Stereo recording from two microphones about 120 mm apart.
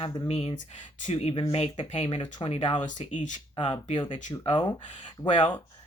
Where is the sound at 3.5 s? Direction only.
45° left (ahead or behind).